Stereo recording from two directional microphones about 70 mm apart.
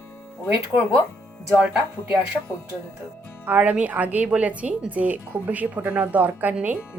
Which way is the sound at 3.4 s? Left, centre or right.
Right.